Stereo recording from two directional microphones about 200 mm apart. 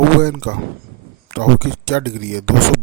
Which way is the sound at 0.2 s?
55° right (ahead or behind).